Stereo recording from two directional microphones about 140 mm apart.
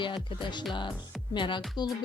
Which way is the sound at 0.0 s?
35° left (ahead or behind).